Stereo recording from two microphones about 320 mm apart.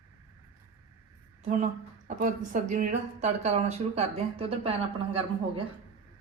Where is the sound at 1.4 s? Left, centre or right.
Right.